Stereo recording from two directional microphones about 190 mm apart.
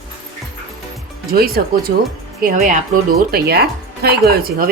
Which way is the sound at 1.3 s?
50° right (ahead or behind).